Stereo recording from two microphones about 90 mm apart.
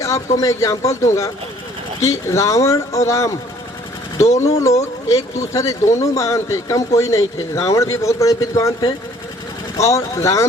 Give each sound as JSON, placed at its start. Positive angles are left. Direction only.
{"t": 0.0, "sound": "speech", "side_deg": 35}